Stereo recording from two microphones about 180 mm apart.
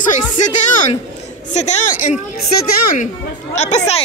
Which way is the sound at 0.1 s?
40° left (ahead or behind).